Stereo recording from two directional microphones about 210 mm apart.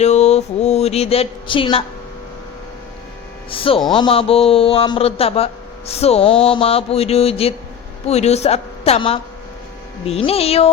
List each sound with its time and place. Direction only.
0.0 s speech: 30° left (ahead or behind)
3.5 s speech: 25° left (ahead or behind)